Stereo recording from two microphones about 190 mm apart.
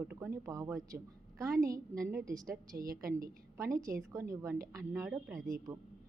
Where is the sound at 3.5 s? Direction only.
15° right (ahead or behind).